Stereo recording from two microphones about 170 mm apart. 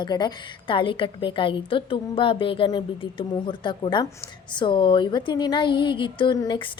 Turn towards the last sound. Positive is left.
turn(degrees=30)  # may be behind; listen again after turning